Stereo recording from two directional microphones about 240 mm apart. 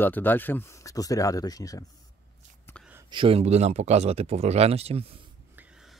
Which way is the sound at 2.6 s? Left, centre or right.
Centre.